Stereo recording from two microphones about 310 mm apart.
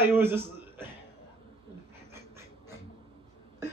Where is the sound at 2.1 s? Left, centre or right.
Centre.